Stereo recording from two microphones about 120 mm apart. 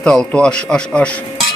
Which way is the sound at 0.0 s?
5° left (ahead or behind).